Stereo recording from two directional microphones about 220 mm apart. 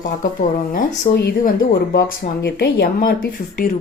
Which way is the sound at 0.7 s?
40° left (ahead or behind).